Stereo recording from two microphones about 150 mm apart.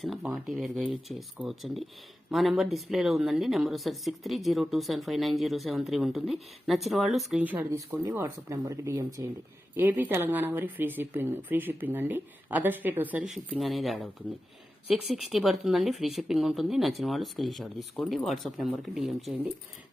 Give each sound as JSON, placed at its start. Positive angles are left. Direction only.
{"t": 0.2, "sound": "a woman's voice", "side_deg": -5}